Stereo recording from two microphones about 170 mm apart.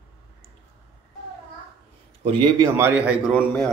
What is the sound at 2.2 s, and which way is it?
Speech, 30° right (ahead or behind).